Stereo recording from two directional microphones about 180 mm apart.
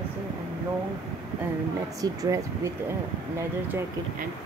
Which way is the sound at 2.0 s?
20° right (ahead or behind).